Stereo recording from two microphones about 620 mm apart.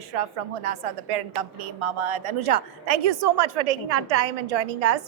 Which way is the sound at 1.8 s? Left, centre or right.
Right.